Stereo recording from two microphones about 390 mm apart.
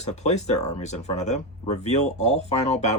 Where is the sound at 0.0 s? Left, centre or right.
Centre.